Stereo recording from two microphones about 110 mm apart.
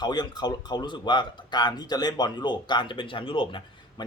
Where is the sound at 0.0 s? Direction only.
40° left (ahead or behind).